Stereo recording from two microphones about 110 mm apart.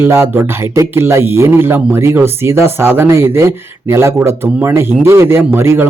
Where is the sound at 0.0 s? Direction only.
25° right (ahead or behind).